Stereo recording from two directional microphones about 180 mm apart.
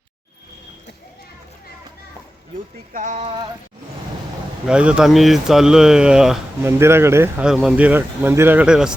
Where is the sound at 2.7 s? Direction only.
45° right (ahead or behind).